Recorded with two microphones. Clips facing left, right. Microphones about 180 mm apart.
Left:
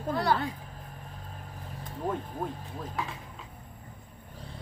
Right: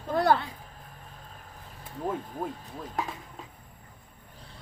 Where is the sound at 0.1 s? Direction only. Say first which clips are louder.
Right 7 dB; 50° right (ahead or behind).